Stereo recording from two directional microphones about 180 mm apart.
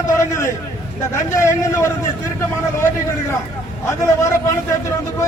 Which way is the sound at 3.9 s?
15° left (ahead or behind).